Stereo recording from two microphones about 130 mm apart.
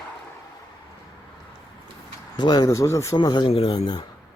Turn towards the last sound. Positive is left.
turn(degrees=50)  # may be behind; listen again after turning